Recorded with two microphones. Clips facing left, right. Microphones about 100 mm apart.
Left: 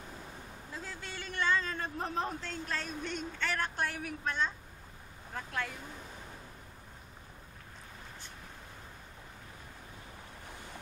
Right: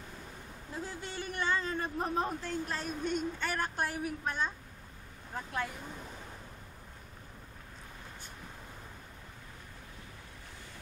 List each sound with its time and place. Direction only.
0.7 s a man's voice: 15° right (ahead or behind)